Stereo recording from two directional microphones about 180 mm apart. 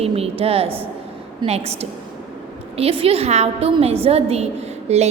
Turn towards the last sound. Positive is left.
turn(degrees=-35)  # may be behind; listen again after turning